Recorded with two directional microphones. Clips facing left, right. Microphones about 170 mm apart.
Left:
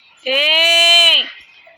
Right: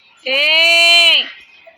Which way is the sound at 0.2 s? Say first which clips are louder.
Left 1 dB; 10° right (ahead or behind).